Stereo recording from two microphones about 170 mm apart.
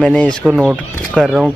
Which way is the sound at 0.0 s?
5° left (ahead or behind).